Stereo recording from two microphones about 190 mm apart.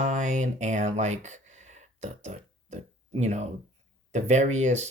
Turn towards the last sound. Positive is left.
turn(degrees=-35)  # may be behind; listen again after turning